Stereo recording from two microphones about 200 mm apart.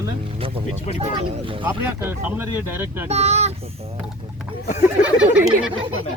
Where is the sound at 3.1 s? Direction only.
35° right (ahead or behind).